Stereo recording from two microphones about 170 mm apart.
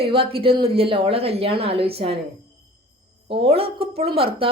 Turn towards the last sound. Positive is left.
turn(degrees=-35)  # may be behind; listen again after turning